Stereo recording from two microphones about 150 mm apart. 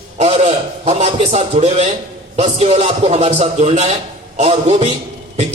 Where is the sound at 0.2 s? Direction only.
40° right (ahead or behind).